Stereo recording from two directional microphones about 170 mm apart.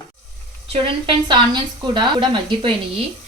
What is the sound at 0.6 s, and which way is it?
A woman's voice, 30° right (ahead or behind).